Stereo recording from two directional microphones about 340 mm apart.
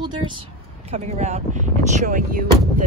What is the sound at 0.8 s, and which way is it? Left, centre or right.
Speech, centre.